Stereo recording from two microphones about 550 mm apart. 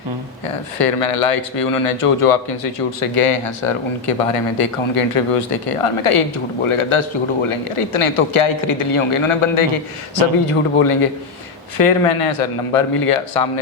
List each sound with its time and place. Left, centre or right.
0.4 s speech: left